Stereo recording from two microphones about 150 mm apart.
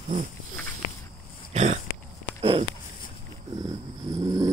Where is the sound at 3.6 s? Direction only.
25° right (ahead or behind).